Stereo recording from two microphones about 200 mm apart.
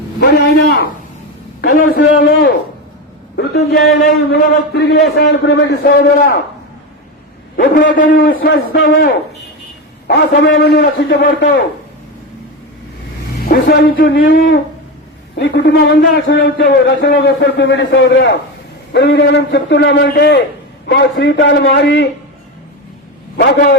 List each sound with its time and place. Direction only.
0.2 s a man's voice: 50° left (ahead or behind)
3.3 s a sound: 55° left (ahead or behind)
4.3 s a man's voice: 55° left (ahead or behind)
7.5 s a man's voice: 45° left (ahead or behind)
10.1 s a man's voice: 60° left (ahead or behind)
13.4 s speech: 50° left (ahead or behind)
15.4 s a man's voice: 60° left (ahead or behind)